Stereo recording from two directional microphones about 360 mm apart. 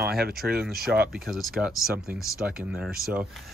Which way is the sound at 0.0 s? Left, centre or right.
Right.